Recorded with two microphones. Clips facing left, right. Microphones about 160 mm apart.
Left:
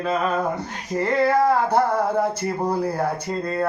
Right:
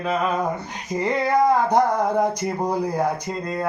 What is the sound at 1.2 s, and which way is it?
Speech, 15° right (ahead or behind).